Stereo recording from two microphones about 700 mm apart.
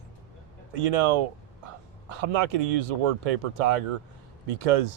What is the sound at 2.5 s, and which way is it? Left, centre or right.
Speech, right.